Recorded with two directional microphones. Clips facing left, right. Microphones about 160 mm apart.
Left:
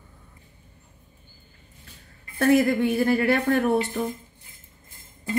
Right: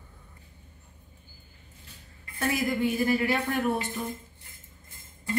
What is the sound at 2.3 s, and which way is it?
Speech, 55° left (ahead or behind).